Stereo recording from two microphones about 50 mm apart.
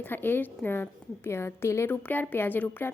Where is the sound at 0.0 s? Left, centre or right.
Left.